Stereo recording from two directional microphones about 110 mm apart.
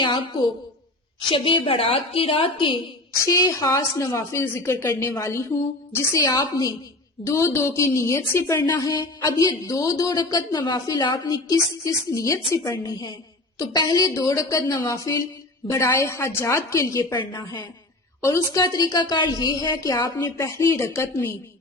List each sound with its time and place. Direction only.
0.0 s a woman's voice: 45° left (ahead or behind)
3.2 s a woman's voice: 30° left (ahead or behind)
17.2 s a woman's voice: 40° left (ahead or behind)
18.3 s a woman's voice: 30° left (ahead or behind)